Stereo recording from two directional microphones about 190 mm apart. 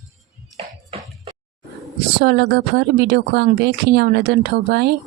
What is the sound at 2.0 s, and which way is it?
Speech, 60° right (ahead or behind).